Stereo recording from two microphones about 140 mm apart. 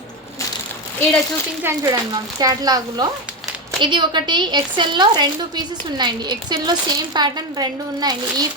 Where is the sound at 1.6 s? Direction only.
25° right (ahead or behind).